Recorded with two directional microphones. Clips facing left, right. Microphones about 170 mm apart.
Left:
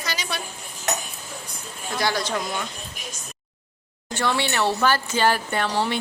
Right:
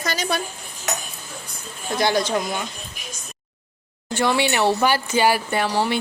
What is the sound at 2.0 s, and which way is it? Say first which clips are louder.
Speech: right 5 dB; 20° right (ahead or behind).